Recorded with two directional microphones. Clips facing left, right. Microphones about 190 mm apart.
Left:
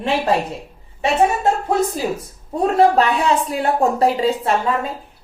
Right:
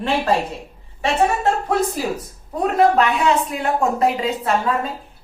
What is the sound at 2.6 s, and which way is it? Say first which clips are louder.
A woman's voice: left 1 dB; 30° left (ahead or behind).